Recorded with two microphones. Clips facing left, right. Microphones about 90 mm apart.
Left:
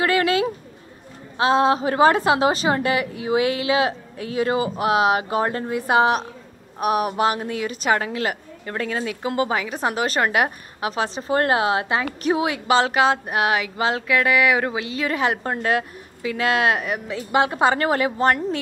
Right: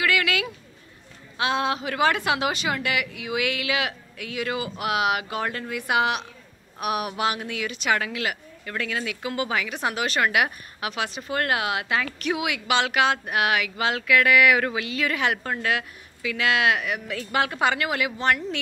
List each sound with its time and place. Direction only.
0.0 s a sound: 35° left (ahead or behind)
1.4 s a woman's voice: 35° left (ahead or behind)
17.1 s a woman's voice: 25° left (ahead or behind); by 18.6 s 40° left (ahead or behind)